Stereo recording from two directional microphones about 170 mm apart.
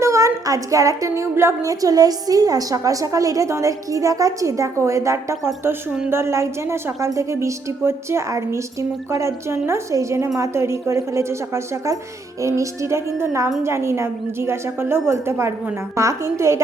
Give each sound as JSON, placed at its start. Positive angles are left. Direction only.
{"t": 0.0, "sound": "a woman's voice", "side_deg": -15}